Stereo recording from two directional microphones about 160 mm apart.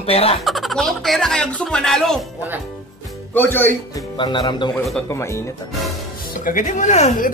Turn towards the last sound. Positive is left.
turn(degrees=45)  # may be behind; listen again after turning